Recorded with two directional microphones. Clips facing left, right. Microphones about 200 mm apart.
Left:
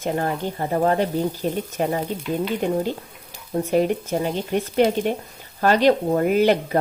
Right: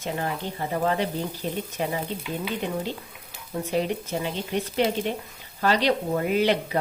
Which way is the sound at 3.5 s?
50° left (ahead or behind).